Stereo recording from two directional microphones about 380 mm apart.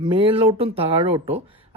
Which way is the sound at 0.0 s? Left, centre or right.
Centre.